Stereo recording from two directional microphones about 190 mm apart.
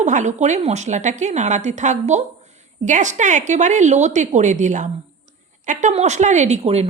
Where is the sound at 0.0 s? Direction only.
40° right (ahead or behind).